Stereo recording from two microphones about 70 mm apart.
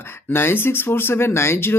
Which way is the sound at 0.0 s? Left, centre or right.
Left.